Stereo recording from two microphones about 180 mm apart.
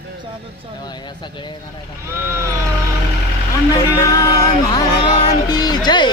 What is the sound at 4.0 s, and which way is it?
Speech, 20° left (ahead or behind).